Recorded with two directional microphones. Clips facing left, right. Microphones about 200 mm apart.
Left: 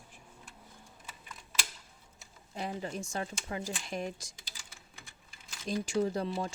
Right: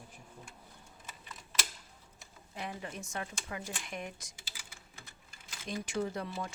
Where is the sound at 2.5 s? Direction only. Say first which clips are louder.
Left 5 dB; 35° left (ahead or behind).